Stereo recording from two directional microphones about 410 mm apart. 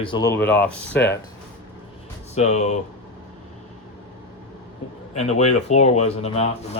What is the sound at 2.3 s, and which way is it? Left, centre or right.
Speech, centre.